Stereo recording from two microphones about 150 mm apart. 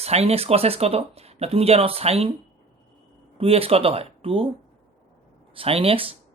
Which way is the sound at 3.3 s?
40° right (ahead or behind).